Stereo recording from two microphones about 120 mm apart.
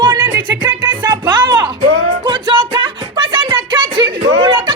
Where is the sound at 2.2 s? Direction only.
45° right (ahead or behind).